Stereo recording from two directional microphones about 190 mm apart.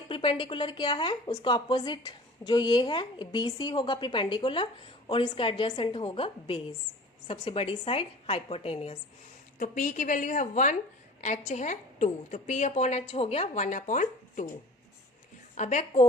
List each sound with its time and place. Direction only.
0.1 s speech: 25° left (ahead or behind)
9.6 s a woman's voice: 45° left (ahead or behind)
15.5 s a woman's voice: 40° left (ahead or behind)